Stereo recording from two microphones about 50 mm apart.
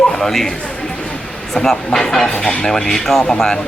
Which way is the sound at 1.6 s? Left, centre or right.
Centre.